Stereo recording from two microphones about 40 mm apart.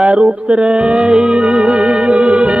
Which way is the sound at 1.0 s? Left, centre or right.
Centre.